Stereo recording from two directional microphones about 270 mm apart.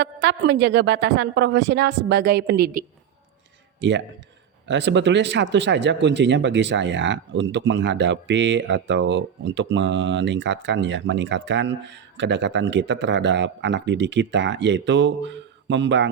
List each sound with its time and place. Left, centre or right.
0.0 s speech: right